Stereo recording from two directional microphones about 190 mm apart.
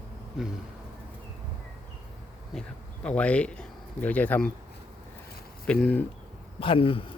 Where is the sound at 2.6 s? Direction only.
5° left (ahead or behind).